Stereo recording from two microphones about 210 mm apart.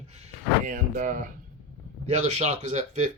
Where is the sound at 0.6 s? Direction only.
40° right (ahead or behind).